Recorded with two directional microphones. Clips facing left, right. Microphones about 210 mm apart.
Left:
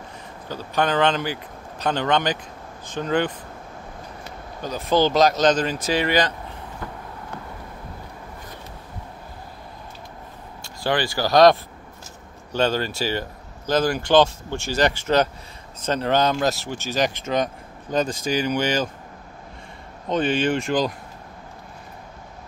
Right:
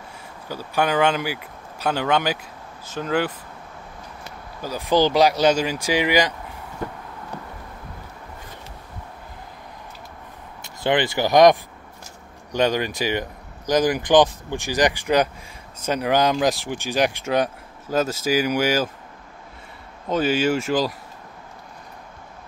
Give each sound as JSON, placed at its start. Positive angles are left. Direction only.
{"t": 0.5, "sound": "speech", "side_deg": -10}
{"t": 4.6, "sound": "speech", "side_deg": -10}
{"t": 10.6, "sound": "speech", "side_deg": -20}
{"t": 12.5, "sound": "speech", "side_deg": -15}
{"t": 20.1, "sound": "speech", "side_deg": -5}